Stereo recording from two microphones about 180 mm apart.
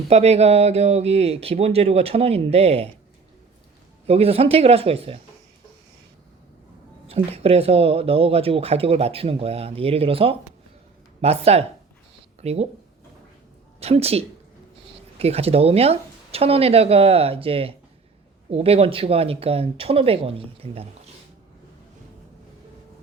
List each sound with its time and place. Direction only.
0.1 s speech: 35° right (ahead or behind)
4.0 s speech: 35° right (ahead or behind)
7.1 s speech: 35° right (ahead or behind)
13.7 s speech: 35° right (ahead or behind)